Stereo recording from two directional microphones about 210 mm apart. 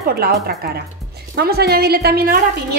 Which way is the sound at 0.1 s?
50° right (ahead or behind).